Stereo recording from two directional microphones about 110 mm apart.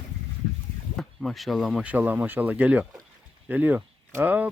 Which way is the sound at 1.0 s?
Centre (ahead or behind).